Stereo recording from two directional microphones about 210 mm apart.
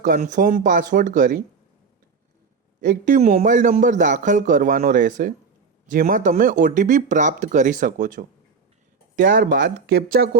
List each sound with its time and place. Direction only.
0.0 s a man's voice: 40° right (ahead or behind)
2.8 s a man's voice: 40° right (ahead or behind)